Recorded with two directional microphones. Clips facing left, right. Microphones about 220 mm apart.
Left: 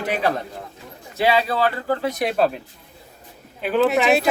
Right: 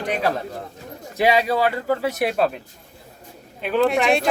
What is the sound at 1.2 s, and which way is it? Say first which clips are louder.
Speech: right 1 dB; 15° right (ahead or behind).